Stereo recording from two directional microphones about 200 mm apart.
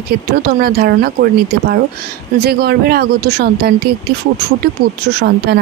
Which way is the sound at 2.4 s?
50° right (ahead or behind).